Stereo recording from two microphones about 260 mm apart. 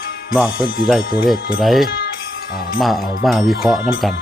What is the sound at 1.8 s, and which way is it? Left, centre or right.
Music, left.